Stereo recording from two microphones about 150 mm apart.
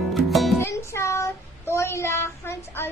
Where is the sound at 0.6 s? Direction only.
15° left (ahead or behind).